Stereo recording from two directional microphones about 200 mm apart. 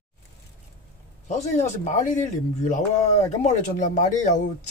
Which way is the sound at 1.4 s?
35° left (ahead or behind).